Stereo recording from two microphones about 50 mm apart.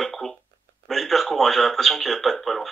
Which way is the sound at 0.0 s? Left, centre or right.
Centre.